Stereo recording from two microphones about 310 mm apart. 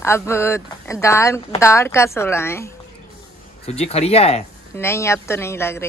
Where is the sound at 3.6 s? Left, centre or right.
Left.